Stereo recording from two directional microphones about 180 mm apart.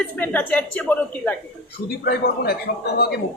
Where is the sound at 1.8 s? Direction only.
60° left (ahead or behind).